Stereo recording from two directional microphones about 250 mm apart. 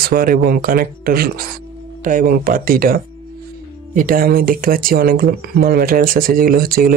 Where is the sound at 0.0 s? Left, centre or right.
Right.